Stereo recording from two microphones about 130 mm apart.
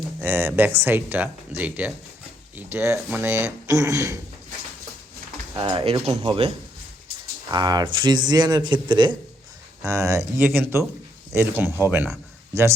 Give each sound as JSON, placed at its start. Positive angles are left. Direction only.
{"t": 0.2, "sound": "speech", "side_deg": -20}
{"t": 5.5, "sound": "speech", "side_deg": -40}
{"t": 7.5, "sound": "a man's voice", "side_deg": -30}
{"t": 9.9, "sound": "speech", "side_deg": -25}